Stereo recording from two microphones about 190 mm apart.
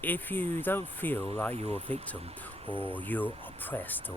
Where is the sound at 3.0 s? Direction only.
10° left (ahead or behind).